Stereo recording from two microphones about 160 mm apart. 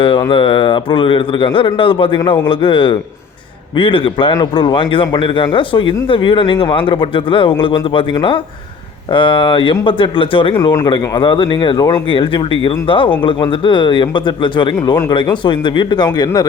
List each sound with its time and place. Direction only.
0.0 s a man's voice: 30° left (ahead or behind)
14.8 s speech: 20° left (ahead or behind)